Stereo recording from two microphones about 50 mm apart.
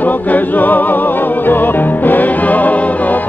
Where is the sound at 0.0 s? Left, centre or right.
Left.